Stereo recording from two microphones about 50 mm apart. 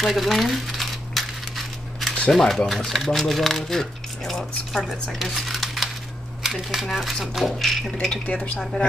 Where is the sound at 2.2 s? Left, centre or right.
Centre.